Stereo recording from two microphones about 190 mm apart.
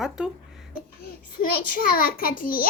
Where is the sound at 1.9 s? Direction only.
50° left (ahead or behind).